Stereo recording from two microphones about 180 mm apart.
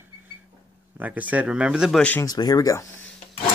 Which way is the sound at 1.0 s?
10° right (ahead or behind).